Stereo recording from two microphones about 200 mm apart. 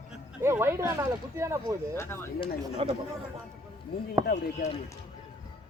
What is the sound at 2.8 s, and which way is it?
Speech, 30° right (ahead or behind).